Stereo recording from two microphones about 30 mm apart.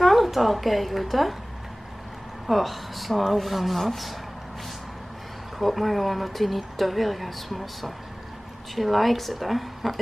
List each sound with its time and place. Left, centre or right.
0.0 s a woman's voice: centre
2.4 s speech: centre
5.6 s speech: centre